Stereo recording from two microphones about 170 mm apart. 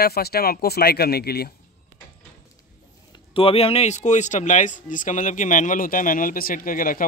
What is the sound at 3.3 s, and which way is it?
Speech, 35° left (ahead or behind).